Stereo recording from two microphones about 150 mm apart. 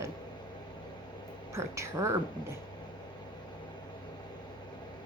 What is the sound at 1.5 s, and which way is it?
Speech, 20° right (ahead or behind).